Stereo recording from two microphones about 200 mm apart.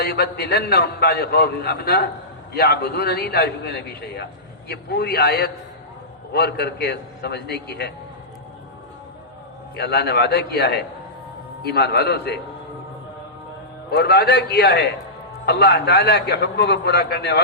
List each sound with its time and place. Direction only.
0.0 s a man's voice: 50° left (ahead or behind)
9.7 s a man's voice: 55° left (ahead or behind)
13.9 s a man's voice: 55° left (ahead or behind)